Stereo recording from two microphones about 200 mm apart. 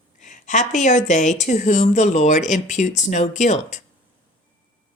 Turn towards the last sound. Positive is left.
turn(degrees=35)  # may be behind; listen again after turning